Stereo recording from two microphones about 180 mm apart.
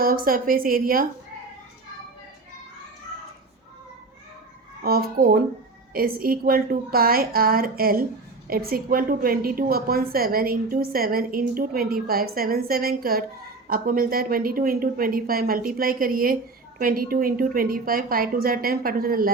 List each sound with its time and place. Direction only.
0.0 s speech: 55° right (ahead or behind)
4.8 s a woman's voice: 55° right (ahead or behind)